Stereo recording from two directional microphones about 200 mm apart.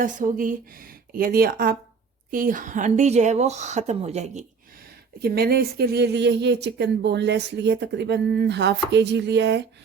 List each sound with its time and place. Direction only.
0.0 s speech: 40° right (ahead or behind)
5.2 s speech: 50° right (ahead or behind)